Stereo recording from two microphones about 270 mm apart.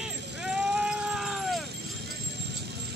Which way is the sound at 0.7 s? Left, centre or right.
Centre.